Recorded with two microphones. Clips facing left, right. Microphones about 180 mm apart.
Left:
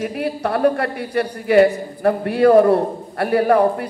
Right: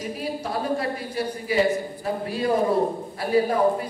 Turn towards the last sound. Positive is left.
turn(degrees=65)  # may be behind; listen again after turning